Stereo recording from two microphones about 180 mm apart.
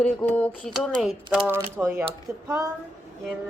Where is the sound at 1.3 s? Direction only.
10° right (ahead or behind).